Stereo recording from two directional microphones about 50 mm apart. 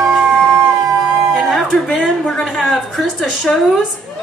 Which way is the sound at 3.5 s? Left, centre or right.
Left.